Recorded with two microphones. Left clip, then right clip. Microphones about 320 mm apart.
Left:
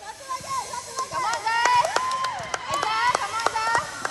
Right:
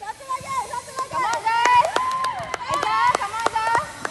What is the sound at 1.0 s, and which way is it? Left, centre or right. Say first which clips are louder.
Run: right 3 dB; right.